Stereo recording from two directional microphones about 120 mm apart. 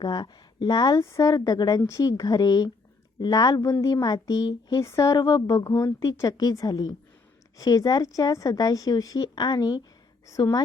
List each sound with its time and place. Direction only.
0.0 s a woman's voice: 40° left (ahead or behind)